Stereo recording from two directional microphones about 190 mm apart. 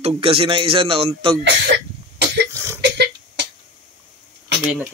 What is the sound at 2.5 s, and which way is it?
Cough, 15° right (ahead or behind).